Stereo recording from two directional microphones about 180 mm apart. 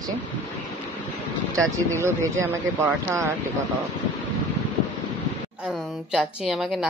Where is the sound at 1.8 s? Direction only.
15° right (ahead or behind).